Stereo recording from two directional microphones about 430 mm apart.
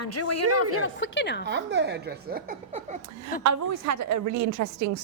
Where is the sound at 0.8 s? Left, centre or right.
Left.